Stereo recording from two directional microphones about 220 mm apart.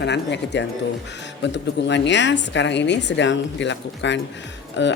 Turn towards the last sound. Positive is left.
turn(degrees=55)  # may be behind; listen again after turning